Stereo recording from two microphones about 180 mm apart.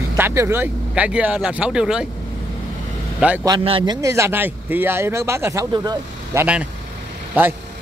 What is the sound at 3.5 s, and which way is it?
Speech, 25° right (ahead or behind).